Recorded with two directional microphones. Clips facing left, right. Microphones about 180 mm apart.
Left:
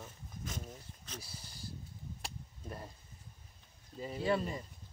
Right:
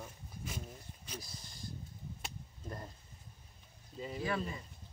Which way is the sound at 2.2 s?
5° left (ahead or behind).